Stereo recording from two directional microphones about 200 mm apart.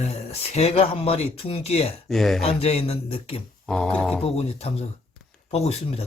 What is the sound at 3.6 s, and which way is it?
Speech, centre (ahead or behind).